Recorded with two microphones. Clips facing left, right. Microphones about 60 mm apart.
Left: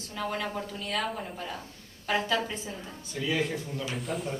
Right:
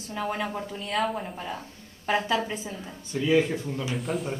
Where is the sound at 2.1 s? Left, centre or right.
Centre.